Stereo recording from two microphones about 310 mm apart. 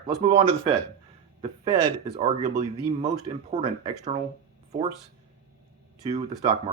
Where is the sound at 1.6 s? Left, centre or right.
Centre.